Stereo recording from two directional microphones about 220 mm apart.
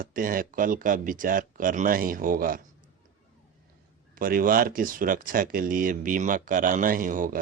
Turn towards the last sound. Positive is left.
turn(degrees=-40)  # may be behind; listen again after turning